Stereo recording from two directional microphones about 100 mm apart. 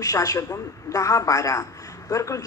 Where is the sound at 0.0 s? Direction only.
35° left (ahead or behind).